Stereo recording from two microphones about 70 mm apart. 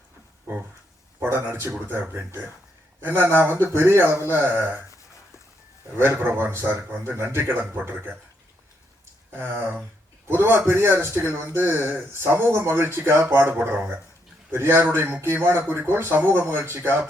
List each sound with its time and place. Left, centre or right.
1.2 s a man's voice: right
6.0 s a man's voice: right
10.2 s a man's voice: right